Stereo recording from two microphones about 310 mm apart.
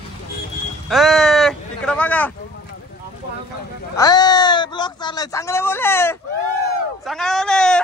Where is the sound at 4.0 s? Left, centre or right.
Centre.